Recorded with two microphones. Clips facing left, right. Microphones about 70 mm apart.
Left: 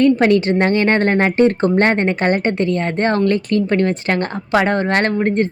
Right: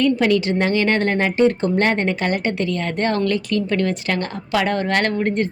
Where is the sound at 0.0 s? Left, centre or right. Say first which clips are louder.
Left 4 dB; left.